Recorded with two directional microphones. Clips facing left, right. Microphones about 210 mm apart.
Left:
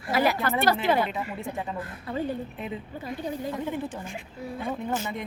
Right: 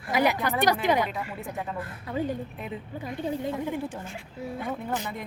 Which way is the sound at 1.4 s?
Centre (ahead or behind).